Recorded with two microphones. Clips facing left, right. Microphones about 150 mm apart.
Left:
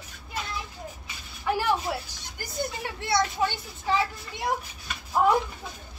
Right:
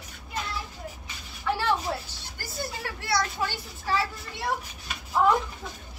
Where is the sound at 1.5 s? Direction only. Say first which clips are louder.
Left 1 dB; 15° left (ahead or behind).